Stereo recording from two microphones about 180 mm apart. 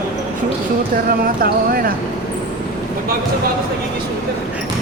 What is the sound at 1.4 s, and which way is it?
Speech, 55° right (ahead or behind).